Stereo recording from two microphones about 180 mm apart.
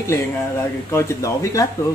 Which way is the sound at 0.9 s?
15° left (ahead or behind).